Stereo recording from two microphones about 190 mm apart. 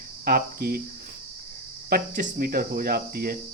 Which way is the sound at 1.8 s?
50° right (ahead or behind).